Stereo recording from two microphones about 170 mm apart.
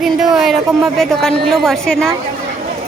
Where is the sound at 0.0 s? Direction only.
Centre (ahead or behind).